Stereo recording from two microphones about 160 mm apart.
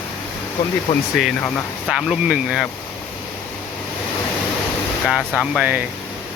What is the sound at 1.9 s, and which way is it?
Speech, 5° right (ahead or behind).